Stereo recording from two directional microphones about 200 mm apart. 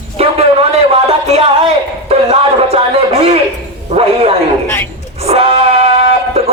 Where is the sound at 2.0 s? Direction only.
30° right (ahead or behind).